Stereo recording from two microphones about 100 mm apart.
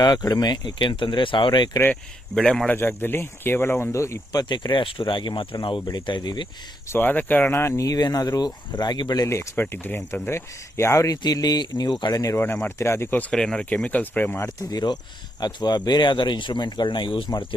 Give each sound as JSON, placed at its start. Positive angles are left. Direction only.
{"t": 0.0, "sound": "speech", "side_deg": 45}
{"t": 2.3, "sound": "speech", "side_deg": 5}
{"t": 2.6, "sound": "speech", "side_deg": 20}
{"t": 4.3, "sound": "speech", "side_deg": 45}
{"t": 6.9, "sound": "speech", "side_deg": 20}
{"t": 9.2, "sound": "speech", "side_deg": 30}
{"t": 12.6, "sound": "speech", "side_deg": 25}
{"t": 13.3, "sound": "speech", "side_deg": 5}
{"t": 14.7, "sound": "speech", "side_deg": 40}